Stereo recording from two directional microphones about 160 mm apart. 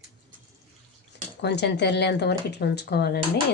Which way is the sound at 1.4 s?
90° left.